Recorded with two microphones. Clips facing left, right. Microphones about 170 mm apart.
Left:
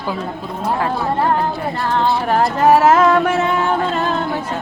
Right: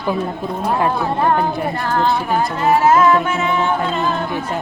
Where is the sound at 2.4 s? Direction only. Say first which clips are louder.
Left 5 dB; 80° left.